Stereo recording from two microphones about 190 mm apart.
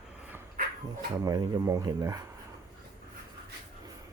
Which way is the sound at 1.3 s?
20° right (ahead or behind).